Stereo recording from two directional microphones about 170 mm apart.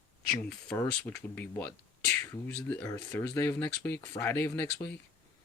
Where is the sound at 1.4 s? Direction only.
10° left (ahead or behind).